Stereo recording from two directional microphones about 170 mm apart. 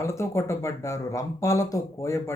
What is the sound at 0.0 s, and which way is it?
Speech, 15° left (ahead or behind).